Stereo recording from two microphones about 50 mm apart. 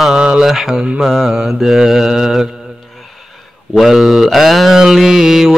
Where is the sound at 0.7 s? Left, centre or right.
Centre.